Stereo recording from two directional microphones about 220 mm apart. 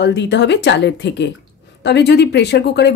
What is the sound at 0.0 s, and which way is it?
Speech, 50° left (ahead or behind).